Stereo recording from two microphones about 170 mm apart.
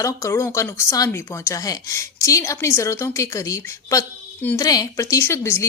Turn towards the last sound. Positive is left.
turn(degrees=15)  # may be behind; listen again after turning